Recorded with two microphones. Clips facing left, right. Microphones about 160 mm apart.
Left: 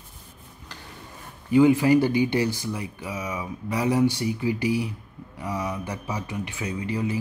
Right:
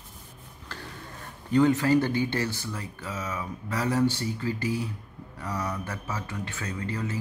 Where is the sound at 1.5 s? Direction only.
10° left (ahead or behind).